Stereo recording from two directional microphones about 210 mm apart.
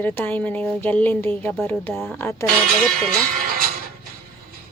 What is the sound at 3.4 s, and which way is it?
Music, 45° right (ahead or behind).